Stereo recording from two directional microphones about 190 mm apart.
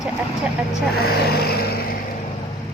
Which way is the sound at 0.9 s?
55° left (ahead or behind).